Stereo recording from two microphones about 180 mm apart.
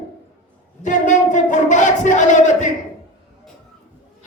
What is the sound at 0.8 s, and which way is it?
Wind instrument, 45° left (ahead or behind).